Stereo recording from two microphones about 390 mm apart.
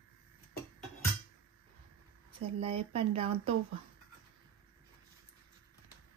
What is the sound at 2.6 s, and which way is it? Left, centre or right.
Speech, centre.